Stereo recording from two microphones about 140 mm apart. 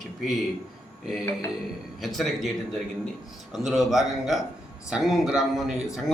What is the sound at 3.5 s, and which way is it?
A man's voice, centre (ahead or behind).